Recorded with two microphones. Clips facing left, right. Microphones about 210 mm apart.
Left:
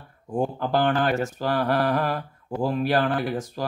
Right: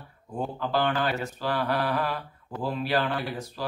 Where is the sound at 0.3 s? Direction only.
45° left (ahead or behind).